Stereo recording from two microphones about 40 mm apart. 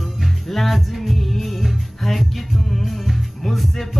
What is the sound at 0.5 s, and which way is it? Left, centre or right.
Music, centre.